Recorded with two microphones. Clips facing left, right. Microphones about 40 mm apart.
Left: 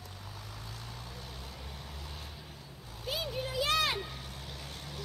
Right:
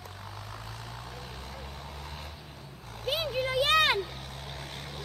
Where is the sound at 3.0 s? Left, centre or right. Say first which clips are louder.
Right 6 dB; right.